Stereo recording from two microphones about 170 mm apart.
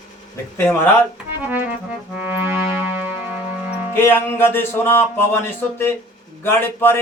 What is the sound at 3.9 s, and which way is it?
Music, 15° left (ahead or behind).